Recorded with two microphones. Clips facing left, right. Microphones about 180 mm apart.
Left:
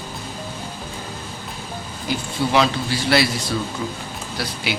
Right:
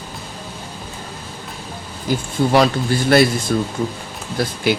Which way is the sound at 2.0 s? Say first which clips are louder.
Right 5 dB; 45° right (ahead or behind).